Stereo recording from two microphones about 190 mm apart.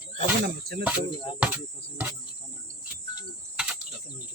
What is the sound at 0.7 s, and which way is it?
Cricket, 55° right (ahead or behind).